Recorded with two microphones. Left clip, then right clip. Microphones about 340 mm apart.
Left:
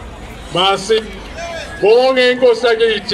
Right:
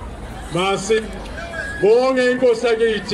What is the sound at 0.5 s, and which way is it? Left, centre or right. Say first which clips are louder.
A man's voice: left 5 dB; left.